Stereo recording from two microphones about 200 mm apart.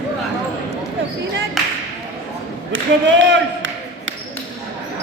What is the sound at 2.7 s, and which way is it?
Speech, 70° right (ahead or behind).